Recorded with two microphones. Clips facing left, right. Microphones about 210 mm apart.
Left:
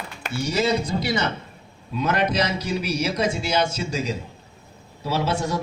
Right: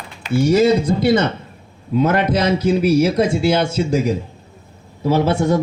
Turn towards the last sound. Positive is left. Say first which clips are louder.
# right 8 dB
turn(degrees=-55)  # may be behind; listen again after turning